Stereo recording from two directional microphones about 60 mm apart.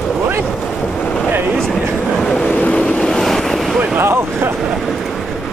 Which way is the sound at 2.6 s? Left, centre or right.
Centre.